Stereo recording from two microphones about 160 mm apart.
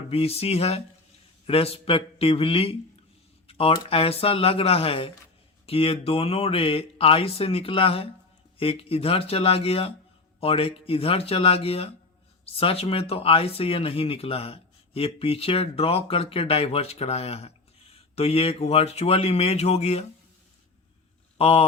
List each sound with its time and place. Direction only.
0.1 s speech: 40° left (ahead or behind)
3.4 s a sound: 40° left (ahead or behind)
3.8 s speech: 35° left (ahead or behind)
21.3 s speech: 35° left (ahead or behind)